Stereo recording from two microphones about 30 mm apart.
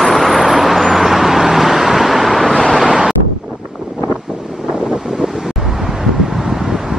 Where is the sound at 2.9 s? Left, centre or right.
Right.